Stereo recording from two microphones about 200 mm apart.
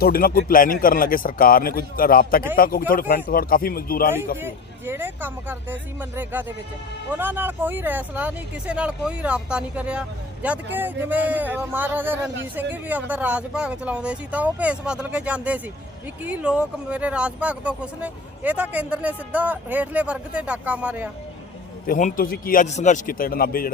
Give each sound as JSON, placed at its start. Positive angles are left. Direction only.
{"t": 0.0, "sound": "speech", "side_deg": 50}
{"t": 4.4, "sound": "speech", "side_deg": -10}
{"t": 21.8, "sound": "speech", "side_deg": 40}